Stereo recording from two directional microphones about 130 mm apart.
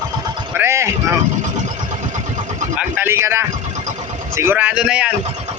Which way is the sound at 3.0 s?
20° right (ahead or behind).